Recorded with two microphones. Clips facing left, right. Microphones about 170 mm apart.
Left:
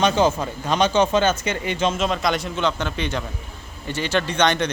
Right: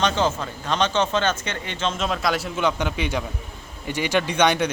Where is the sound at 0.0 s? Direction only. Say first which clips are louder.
Left 4 dB; 10° left (ahead or behind).